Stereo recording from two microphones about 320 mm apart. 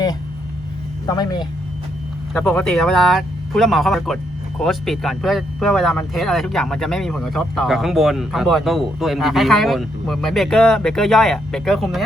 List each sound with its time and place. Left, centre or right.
1.0 s speech: centre
2.3 s speech: centre